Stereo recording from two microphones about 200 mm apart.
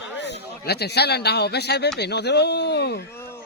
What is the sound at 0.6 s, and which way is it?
A man's voice, 55° left (ahead or behind).